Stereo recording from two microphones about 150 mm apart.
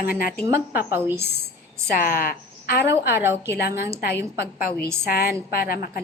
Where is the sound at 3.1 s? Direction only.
15° right (ahead or behind).